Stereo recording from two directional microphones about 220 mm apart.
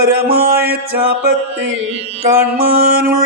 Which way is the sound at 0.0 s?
45° right (ahead or behind).